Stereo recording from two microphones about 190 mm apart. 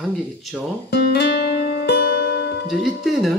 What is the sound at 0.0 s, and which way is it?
Speech, centre (ahead or behind).